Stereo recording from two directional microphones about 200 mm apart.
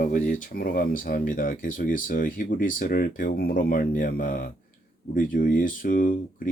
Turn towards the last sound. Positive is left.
turn(degrees=45)  # may be behind; listen again after turning